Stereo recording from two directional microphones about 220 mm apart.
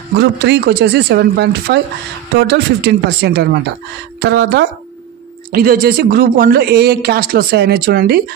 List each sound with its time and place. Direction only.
0.1 s speech: 50° right (ahead or behind)